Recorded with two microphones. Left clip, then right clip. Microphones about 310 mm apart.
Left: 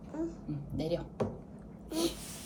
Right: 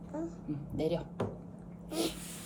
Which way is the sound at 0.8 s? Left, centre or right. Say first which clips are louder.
Right 1 dB; centre.